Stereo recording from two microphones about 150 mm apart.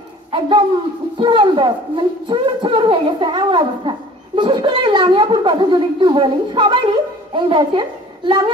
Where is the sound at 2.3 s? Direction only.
35° right (ahead or behind).